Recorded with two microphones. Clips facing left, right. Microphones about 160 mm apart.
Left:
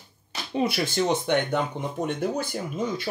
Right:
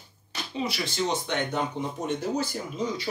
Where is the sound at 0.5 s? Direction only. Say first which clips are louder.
Left 5 dB; 55° left (ahead or behind).